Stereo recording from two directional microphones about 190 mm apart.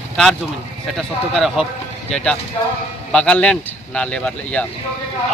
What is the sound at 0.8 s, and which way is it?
A man's voice, centre (ahead or behind).